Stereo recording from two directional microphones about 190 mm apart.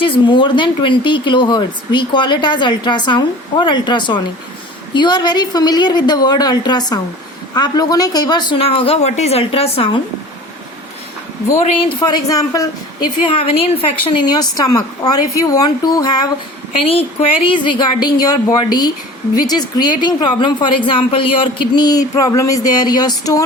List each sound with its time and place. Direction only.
0.0 s a woman's voice: 25° left (ahead or behind)
11.5 s a woman's voice: 30° left (ahead or behind)